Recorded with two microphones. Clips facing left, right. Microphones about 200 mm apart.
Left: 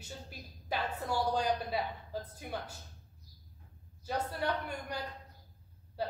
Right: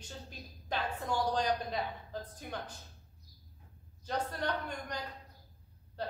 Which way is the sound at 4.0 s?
10° left (ahead or behind).